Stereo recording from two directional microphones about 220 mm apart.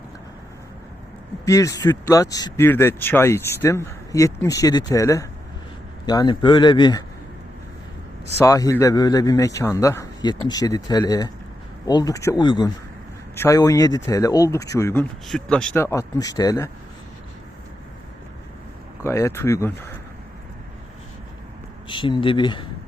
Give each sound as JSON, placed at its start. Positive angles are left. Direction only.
{"t": 1.5, "sound": "speech", "side_deg": 15}
{"t": 8.4, "sound": "speech", "side_deg": 15}
{"t": 19.0, "sound": "speech", "side_deg": 10}
{"t": 21.8, "sound": "speech", "side_deg": 20}